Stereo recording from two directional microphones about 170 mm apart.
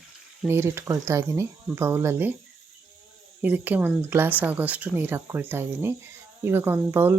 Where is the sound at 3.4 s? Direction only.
10° right (ahead or behind).